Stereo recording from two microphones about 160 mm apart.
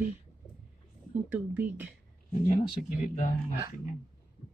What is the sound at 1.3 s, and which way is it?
Speech, 10° right (ahead or behind).